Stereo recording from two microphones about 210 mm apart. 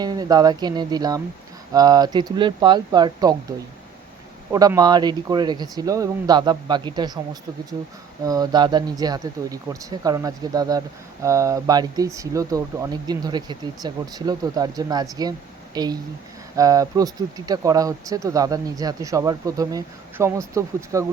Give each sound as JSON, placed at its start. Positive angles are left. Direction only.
{"t": 0.0, "sound": "speech", "side_deg": -20}
{"t": 4.5, "sound": "speech", "side_deg": -15}
{"t": 8.2, "sound": "speech", "side_deg": -15}